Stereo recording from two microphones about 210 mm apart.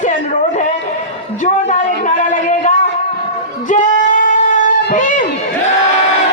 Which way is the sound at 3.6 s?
35° left (ahead or behind).